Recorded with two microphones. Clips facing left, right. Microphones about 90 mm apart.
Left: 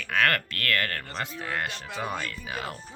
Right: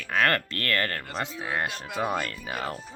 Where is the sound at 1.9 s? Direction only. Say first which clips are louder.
Right 5 dB; 5° right (ahead or behind).